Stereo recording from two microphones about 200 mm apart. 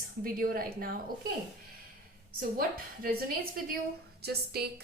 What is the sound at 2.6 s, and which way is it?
A woman's voice, 45° right (ahead or behind).